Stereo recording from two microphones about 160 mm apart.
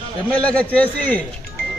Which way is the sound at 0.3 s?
10° left (ahead or behind).